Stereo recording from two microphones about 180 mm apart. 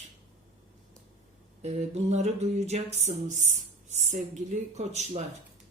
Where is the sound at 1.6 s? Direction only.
35° right (ahead or behind).